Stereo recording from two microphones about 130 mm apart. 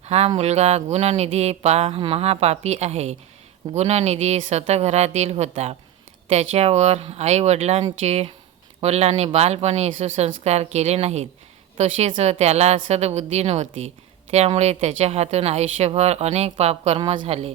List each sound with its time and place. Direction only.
0.0 s a woman's voice: 55° right (ahead or behind)